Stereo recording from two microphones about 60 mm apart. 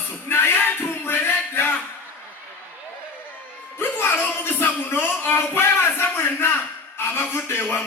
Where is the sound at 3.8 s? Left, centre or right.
Left.